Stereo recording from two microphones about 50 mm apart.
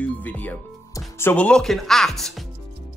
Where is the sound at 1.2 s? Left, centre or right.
Left.